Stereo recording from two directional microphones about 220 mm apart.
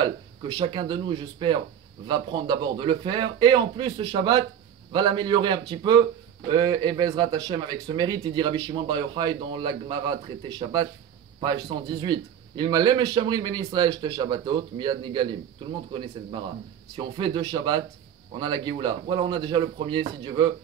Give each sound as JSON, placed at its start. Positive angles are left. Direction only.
{"t": 0.0, "sound": "speech", "side_deg": -20}